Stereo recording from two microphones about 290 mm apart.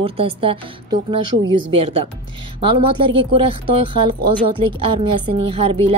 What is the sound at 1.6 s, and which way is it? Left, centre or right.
A woman's voice, centre.